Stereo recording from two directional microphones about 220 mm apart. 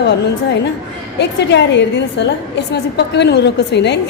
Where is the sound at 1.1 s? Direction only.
50° left (ahead or behind).